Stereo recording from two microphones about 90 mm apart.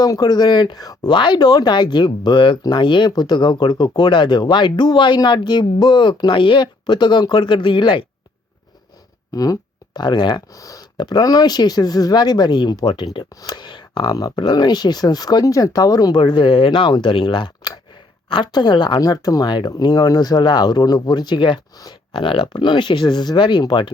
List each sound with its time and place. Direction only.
0.0 s speech: 45° left (ahead or behind)
1.1 s speech: 60° left (ahead or behind)
9.3 s speech: 45° left (ahead or behind)
10.5 s speech: 40° left (ahead or behind); by 14.2 s 60° left (ahead or behind)
14.2 s speech: 50° left (ahead or behind); by 16.9 s 75° left (ahead or behind)
16.9 s speech: 65° left (ahead or behind); by 19.5 s 45° left (ahead or behind)
19.5 s speech: 60° left (ahead or behind)
19.7 s speech: 50° left (ahead or behind); by 21.6 s 65° left (ahead or behind)
22.1 s speech: 85° left; by 23.9 s 65° left (ahead or behind)